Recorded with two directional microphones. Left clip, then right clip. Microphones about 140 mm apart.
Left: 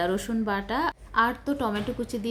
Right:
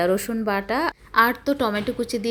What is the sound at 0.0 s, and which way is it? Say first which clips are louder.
A woman's voice: right 5 dB; 20° right (ahead or behind).